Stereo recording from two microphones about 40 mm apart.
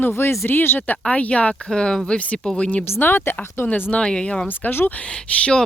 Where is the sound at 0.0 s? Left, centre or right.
Left.